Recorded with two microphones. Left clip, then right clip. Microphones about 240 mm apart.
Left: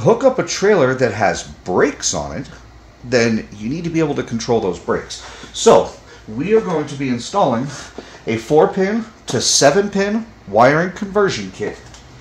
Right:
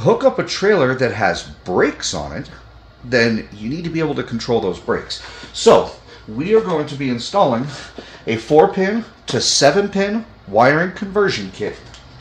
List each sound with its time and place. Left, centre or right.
0.0 s speech: centre
6.5 s speech: centre